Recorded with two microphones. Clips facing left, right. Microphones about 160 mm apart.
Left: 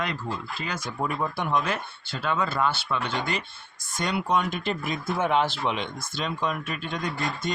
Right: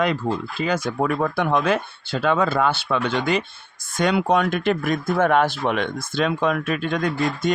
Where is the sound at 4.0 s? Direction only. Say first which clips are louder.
Right 7 dB; 65° right (ahead or behind).